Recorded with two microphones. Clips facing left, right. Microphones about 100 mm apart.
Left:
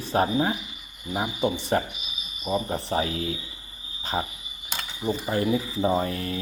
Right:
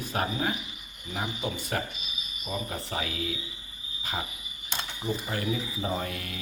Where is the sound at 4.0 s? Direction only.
30° left (ahead or behind).